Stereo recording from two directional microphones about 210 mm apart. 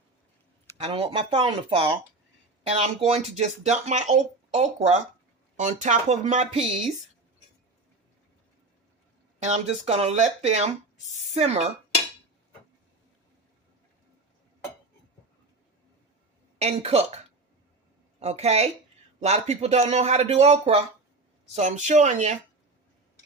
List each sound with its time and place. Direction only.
0.8 s speech: 25° right (ahead or behind)
9.4 s speech: 30° right (ahead or behind)
16.6 s speech: 30° right (ahead or behind)
18.2 s speech: 30° right (ahead or behind)